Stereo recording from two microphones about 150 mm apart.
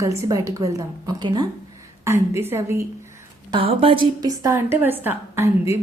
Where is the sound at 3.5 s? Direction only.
35° right (ahead or behind).